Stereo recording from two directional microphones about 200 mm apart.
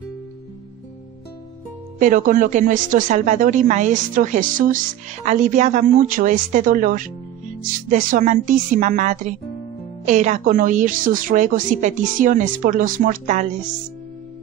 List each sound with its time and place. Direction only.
2.0 s speech: 40° right (ahead or behind)